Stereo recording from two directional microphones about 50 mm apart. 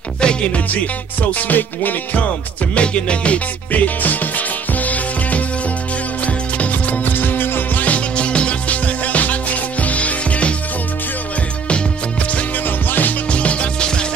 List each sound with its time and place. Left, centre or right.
0.2 s music: centre
1.5 s music: left
2.7 s music: left
12.6 s music: left
13.3 s music: left